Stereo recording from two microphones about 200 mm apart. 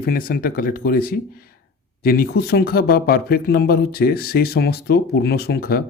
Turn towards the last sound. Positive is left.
turn(degrees=50)  # may be behind; listen again after turning